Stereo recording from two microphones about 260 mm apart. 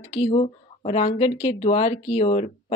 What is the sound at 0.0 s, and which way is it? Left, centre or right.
Speech, left.